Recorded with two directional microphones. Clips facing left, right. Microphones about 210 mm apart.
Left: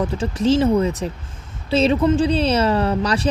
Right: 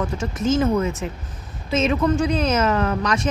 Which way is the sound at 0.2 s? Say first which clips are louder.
Left 3 dB; 35° left (ahead or behind).